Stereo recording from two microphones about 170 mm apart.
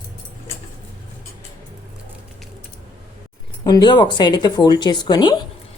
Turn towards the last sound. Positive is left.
turn(degrees=25)  # may be behind; listen again after turning